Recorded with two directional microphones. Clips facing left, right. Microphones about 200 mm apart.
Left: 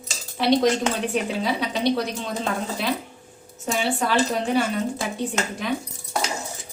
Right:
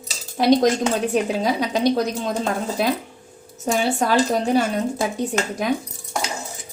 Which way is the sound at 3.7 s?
40° right (ahead or behind).